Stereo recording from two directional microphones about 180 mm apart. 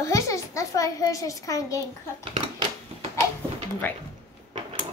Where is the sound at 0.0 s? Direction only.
15° left (ahead or behind).